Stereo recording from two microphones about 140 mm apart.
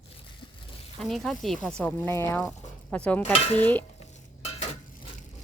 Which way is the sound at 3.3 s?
50° left (ahead or behind).